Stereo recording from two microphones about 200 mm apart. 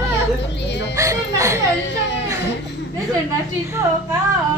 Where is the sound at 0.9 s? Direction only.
15° right (ahead or behind).